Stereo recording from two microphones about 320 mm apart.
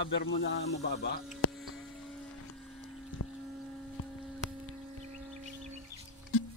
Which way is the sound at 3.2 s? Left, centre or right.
Left.